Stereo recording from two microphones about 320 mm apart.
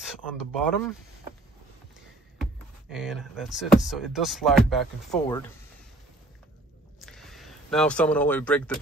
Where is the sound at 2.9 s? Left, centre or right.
Centre.